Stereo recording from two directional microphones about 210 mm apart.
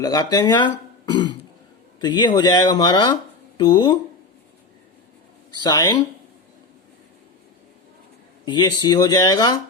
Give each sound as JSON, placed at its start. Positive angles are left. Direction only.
{"t": 0.0, "sound": "speech", "side_deg": 15}
{"t": 5.6, "sound": "speech", "side_deg": 15}
{"t": 8.4, "sound": "speech", "side_deg": 20}